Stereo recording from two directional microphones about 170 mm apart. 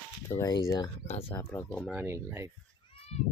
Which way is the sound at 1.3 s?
15° left (ahead or behind).